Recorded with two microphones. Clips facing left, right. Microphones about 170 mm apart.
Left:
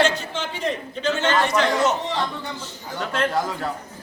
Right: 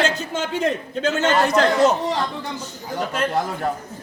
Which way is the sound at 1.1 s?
40° right (ahead or behind).